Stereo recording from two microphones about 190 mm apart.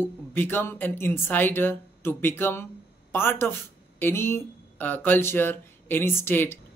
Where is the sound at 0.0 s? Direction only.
10° left (ahead or behind).